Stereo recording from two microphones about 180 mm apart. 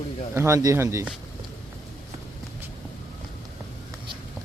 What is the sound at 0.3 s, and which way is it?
Speech, 15° right (ahead or behind).